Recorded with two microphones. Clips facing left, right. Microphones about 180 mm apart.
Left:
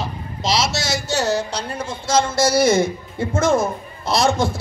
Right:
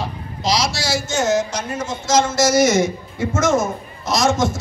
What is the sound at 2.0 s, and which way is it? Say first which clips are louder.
Speech: right 1 dB; 30° left (ahead or behind).